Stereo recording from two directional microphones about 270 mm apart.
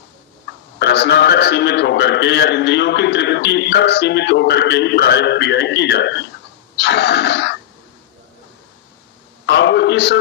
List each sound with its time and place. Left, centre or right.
0.8 s a man's voice: left
6.7 s throat clearing: left
9.5 s a sound: left